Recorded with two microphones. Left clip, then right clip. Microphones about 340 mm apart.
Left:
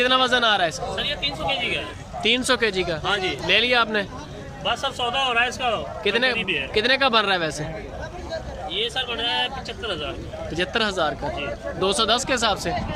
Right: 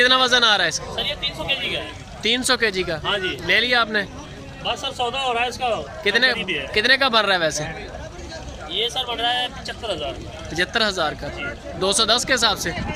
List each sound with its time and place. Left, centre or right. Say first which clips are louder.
0.0 s speech: right 3 dB; centre
0.9 s speech: right 1 dB; centre
2.2 s speech: right 1 dB; centre
4.7 s speech: even; centre
6.0 s speech: right 4 dB; centre
8.7 s speech: right 2 dB; centre
10.5 s speech: right 3 dB; centre